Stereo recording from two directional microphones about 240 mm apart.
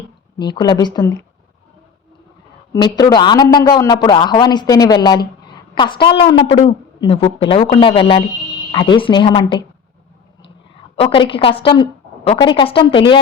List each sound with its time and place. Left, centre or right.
0.3 s a man's voice: centre
2.7 s a man's voice: centre
10.9 s a woman's voice: left